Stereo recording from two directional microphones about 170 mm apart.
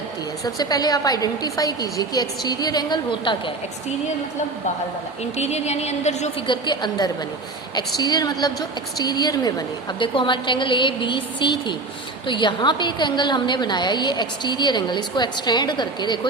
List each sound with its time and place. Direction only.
0.4 s a woman's voice: 25° left (ahead or behind)
5.4 s a woman's voice: 40° left (ahead or behind)
6.5 s a woman's voice: 25° left (ahead or behind)